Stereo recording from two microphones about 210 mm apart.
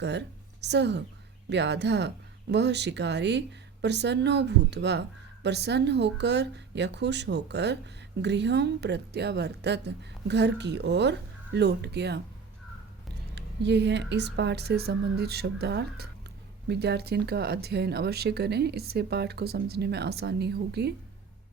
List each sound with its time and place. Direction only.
0.0 s a woman's voice: 55° right (ahead or behind)
13.3 s speech: 55° right (ahead or behind)